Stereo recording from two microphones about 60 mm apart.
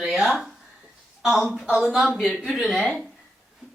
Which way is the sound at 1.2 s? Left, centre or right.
Centre.